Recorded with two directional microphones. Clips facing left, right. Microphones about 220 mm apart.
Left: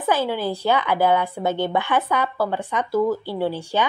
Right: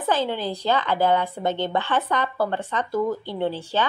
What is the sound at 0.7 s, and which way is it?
A woman's voice, 15° left (ahead or behind).